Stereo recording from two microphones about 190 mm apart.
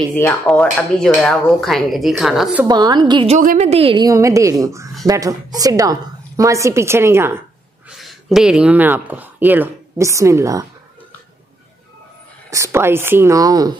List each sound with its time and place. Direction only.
0.1 s speech: 10° left (ahead or behind)
2.6 s a woman's voice: 20° right (ahead or behind)
3.3 s a woman's voice: 40° right (ahead or behind); by 7.4 s 10° right (ahead or behind)
8.0 s speech: centre (ahead or behind); by 10.7 s 15° right (ahead or behind)
12.4 s a woman's voice: 15° right (ahead or behind)